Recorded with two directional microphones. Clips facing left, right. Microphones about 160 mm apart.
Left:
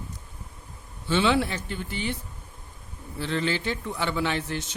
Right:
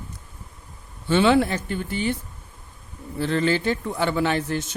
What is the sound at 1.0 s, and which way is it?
Speech, 50° right (ahead or behind).